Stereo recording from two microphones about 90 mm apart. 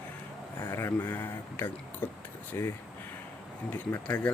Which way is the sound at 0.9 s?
20° left (ahead or behind).